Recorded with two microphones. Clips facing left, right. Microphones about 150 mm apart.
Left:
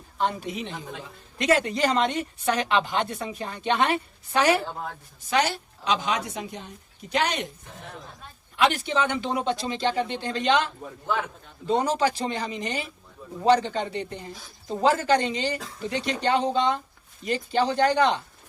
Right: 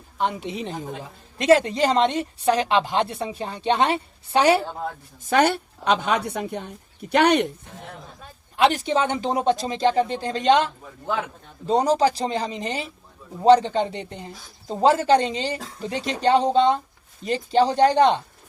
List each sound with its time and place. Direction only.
0.2 s a woman's voice: 20° right (ahead or behind)
0.5 s a woman's voice: 40° right (ahead or behind)
5.2 s a woman's voice: 55° right (ahead or behind)
8.5 s speech: 35° right (ahead or behind)
11.7 s a woman's voice: 35° right (ahead or behind)